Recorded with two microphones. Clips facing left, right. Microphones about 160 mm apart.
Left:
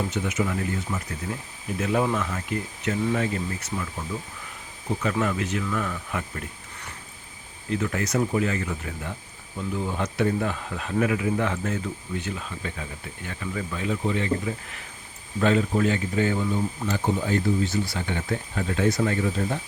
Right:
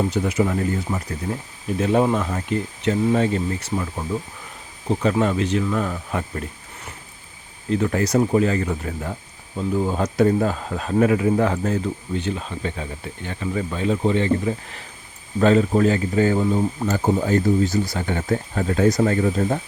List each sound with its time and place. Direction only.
0.1 s speech: 35° right (ahead or behind)
7.7 s speech: 35° right (ahead or behind)